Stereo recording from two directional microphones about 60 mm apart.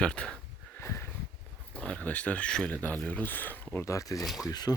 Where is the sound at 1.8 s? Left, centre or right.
Left.